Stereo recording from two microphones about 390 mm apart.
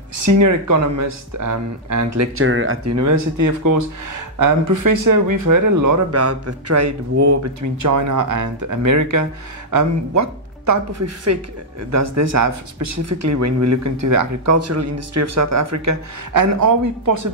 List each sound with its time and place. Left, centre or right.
0.2 s speech: right